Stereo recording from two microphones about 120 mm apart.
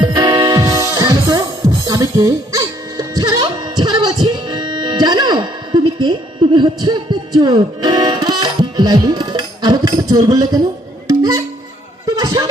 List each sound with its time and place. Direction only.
0.0 s music: 35° right (ahead or behind)
10.1 s speech: 30° right (ahead or behind)
12.0 s a sound: 30° right (ahead or behind)